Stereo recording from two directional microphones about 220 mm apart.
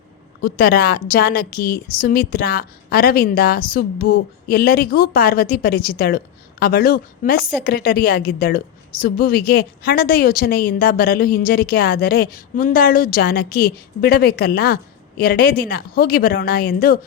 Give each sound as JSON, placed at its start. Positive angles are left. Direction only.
{"t": 0.4, "sound": "a woman's voice", "side_deg": 45}